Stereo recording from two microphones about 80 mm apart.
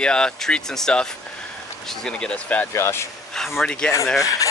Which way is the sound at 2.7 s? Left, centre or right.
Left.